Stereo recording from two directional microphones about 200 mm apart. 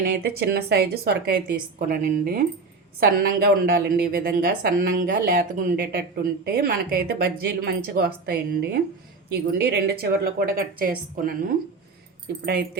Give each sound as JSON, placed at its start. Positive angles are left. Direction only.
{"t": 0.0, "sound": "a woman's voice", "side_deg": -50}